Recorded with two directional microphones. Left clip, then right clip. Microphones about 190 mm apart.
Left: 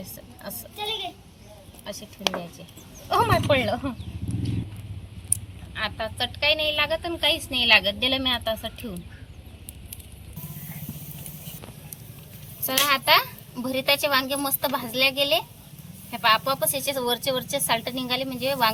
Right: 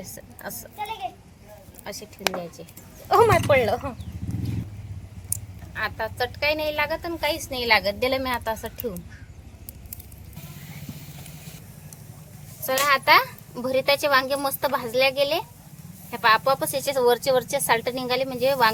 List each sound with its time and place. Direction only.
0.0 s a sound: 55° right (ahead or behind)
0.6 s a sound: 45° right (ahead or behind)
1.8 s speech: 60° right (ahead or behind)
3.1 s speech: 55° right (ahead or behind)
5.7 s a child's voice: 65° right (ahead or behind)
12.6 s a child's voice: 60° right (ahead or behind)